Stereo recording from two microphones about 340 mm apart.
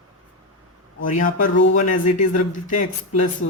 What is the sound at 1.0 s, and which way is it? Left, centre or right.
Speech, left.